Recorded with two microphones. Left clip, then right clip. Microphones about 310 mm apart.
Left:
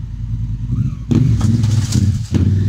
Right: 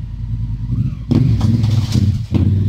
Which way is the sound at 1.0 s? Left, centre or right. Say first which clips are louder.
Even; centre.